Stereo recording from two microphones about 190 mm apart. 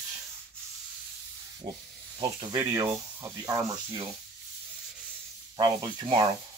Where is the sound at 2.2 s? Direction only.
20° right (ahead or behind).